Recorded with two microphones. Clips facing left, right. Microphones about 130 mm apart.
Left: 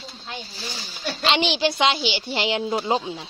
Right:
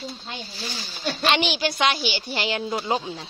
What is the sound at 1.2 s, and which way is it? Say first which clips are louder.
A woman's voice: left 2 dB; 20° left (ahead or behind).